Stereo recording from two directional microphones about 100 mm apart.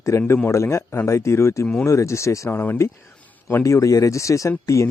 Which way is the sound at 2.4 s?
20° left (ahead or behind).